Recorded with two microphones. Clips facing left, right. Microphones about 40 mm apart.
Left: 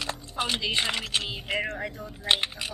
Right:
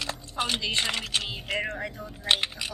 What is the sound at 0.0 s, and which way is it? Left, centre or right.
Speech, centre.